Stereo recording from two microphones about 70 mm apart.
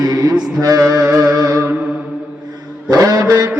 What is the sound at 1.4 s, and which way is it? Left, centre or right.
Music, right.